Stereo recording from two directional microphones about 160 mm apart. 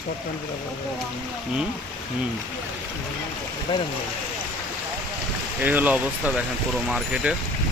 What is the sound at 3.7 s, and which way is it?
Speech, 35° left (ahead or behind).